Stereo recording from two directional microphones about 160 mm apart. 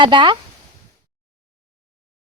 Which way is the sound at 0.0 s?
30° right (ahead or behind).